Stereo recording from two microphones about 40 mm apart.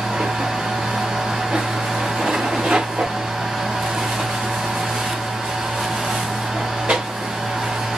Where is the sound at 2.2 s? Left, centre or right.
Centre.